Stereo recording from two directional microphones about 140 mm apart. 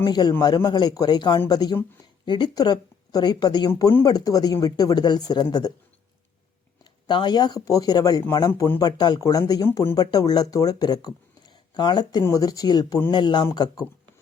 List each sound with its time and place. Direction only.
0.0 s speech: 30° left (ahead or behind)
7.1 s speech: 35° left (ahead or behind)
8.9 s speech: 30° left (ahead or behind)
9.6 s speech: 15° left (ahead or behind)
9.9 s speech: 25° left (ahead or behind)